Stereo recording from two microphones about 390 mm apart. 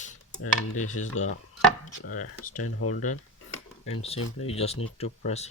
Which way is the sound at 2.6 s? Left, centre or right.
Left.